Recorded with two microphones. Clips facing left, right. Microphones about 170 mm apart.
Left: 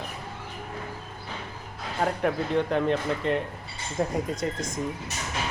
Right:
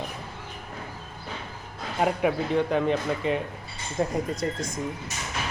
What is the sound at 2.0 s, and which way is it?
Speech, 5° right (ahead or behind).